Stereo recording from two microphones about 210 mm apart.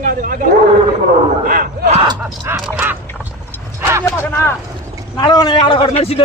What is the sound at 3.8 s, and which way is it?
Vehicle, 10° right (ahead or behind).